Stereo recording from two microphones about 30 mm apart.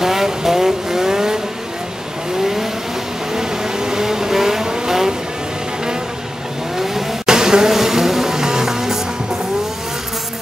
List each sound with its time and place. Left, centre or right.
0.0 s vehicle: centre
2.4 s vehicle: centre
6.8 s vehicle: centre